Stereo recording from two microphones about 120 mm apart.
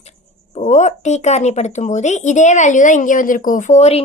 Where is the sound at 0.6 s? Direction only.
80° left.